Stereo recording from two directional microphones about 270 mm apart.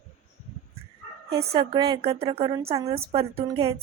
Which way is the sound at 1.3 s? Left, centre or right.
Centre.